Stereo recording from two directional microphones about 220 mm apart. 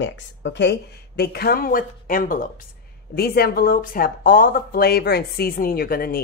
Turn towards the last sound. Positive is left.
turn(degrees=40)  # may be behind; listen again after turning